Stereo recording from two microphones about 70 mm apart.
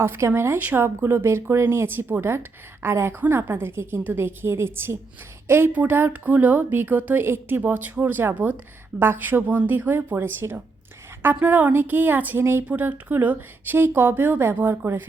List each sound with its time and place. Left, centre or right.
0.0 s speech: right
0.6 s speech: right
0.9 s speech: right
11.4 s speech: right
12.4 s speech: right
12.8 s speech: right